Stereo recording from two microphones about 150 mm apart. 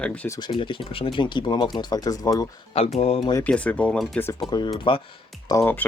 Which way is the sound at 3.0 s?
40° left (ahead or behind).